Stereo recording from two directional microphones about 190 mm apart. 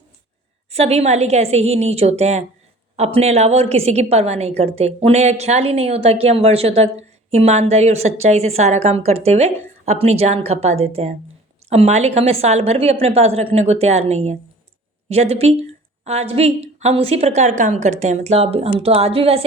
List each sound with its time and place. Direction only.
0.7 s a woman's voice: 35° right (ahead or behind)